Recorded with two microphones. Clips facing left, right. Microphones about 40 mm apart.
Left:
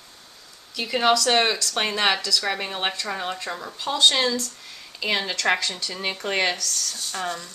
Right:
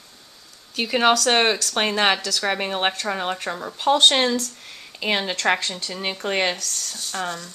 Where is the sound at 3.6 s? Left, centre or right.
Right.